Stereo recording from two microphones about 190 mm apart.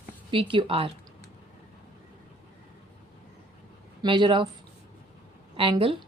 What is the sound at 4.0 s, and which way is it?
Speech, 25° right (ahead or behind).